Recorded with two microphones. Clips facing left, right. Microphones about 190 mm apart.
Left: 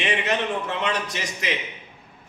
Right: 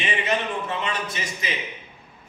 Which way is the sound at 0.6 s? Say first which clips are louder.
Left 2 dB; 75° left (ahead or behind).